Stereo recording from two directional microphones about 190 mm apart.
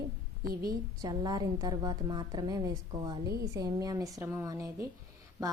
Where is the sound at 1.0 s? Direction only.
20° right (ahead or behind).